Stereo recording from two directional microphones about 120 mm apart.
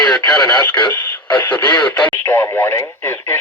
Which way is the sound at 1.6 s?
35° left (ahead or behind).